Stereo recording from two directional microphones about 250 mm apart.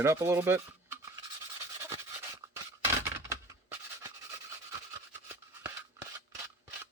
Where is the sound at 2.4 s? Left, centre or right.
Centre.